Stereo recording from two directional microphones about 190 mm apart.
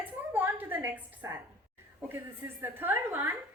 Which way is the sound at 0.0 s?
10° right (ahead or behind).